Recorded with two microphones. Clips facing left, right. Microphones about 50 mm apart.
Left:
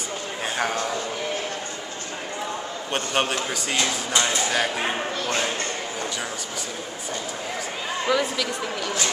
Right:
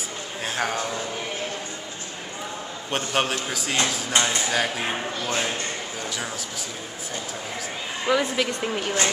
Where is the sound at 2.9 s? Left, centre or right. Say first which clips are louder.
Even; centre.